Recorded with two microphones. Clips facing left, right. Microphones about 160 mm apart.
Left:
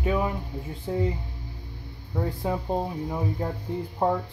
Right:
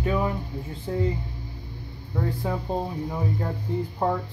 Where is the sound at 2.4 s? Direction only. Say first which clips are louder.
Left 1 dB; 15° left (ahead or behind).